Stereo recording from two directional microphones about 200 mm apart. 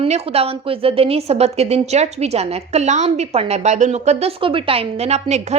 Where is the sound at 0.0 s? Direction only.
30° right (ahead or behind).